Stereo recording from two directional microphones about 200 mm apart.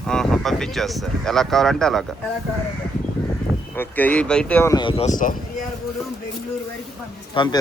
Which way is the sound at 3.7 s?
10° left (ahead or behind).